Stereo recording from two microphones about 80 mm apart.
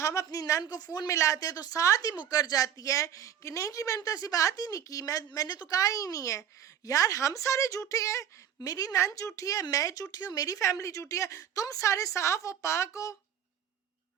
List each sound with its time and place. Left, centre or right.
0.0 s a woman's voice: left
0.6 s a woman's voice: left